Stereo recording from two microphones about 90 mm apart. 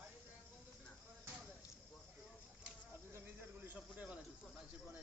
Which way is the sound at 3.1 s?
20° right (ahead or behind).